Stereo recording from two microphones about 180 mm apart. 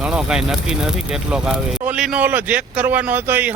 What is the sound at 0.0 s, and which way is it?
Speech, 5° right (ahead or behind).